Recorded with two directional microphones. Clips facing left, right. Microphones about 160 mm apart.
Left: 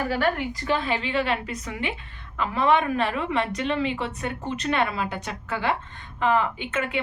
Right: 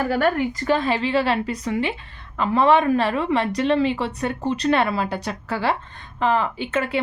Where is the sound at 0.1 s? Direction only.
45° right (ahead or behind).